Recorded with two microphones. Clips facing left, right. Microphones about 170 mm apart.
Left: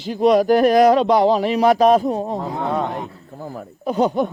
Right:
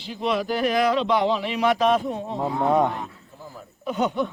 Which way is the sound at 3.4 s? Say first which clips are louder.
Left 10 dB; 60° left (ahead or behind).